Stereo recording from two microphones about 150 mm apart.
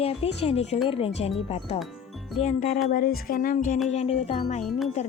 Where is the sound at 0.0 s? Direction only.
40° left (ahead or behind).